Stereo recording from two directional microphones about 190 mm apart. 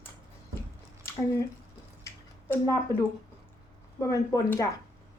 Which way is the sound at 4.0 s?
15° left (ahead or behind).